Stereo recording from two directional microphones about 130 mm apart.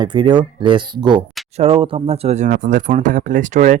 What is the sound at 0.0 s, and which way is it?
Speech, 35° right (ahead or behind).